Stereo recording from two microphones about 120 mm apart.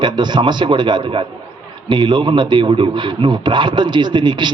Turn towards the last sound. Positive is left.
turn(degrees=-40)  # may be behind; listen again after turning